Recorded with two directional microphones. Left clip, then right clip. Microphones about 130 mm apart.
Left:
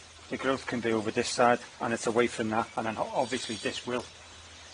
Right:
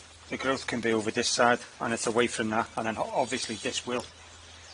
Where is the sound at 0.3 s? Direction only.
25° right (ahead or behind).